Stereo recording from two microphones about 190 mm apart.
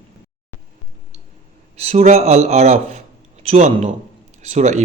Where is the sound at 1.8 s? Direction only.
35° right (ahead or behind).